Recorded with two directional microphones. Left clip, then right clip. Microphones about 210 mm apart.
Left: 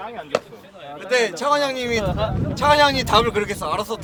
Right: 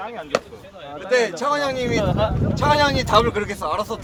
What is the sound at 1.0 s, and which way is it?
Speech, 55° left (ahead or behind).